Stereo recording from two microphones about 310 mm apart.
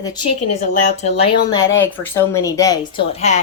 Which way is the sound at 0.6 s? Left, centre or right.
Left.